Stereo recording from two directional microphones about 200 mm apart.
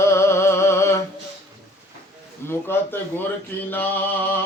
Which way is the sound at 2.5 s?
10° left (ahead or behind).